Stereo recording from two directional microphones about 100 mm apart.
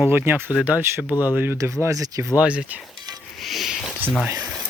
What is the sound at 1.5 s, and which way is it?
Speech, 30° right (ahead or behind).